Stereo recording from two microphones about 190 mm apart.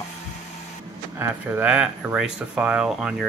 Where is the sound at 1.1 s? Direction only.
10° right (ahead or behind).